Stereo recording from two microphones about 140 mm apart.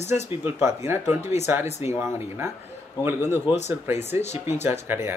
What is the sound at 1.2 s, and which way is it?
Speech, 55° left (ahead or behind).